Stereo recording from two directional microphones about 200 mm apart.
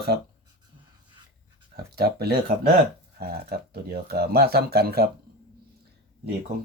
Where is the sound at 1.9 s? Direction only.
50° right (ahead or behind).